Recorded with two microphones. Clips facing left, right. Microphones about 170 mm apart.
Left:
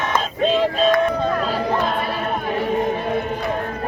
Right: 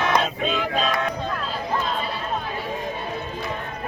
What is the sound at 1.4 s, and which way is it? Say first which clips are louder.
Music: left 6 dB; 70° left (ahead or behind).